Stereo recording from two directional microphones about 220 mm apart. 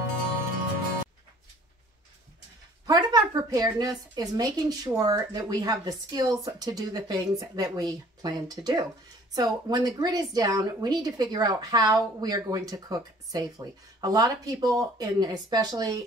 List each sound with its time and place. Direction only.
2.9 s speech: 20° right (ahead or behind)